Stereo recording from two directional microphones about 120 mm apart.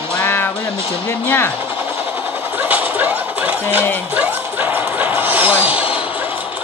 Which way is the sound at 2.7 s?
15° right (ahead or behind).